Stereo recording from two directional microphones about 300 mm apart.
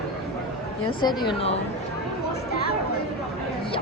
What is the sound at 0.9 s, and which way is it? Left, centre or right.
Speech, centre.